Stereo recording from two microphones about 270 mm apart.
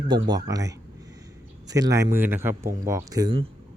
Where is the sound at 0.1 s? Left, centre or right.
Centre.